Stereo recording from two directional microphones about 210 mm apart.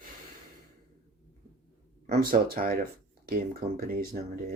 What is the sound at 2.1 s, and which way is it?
Speech, 45° right (ahead or behind).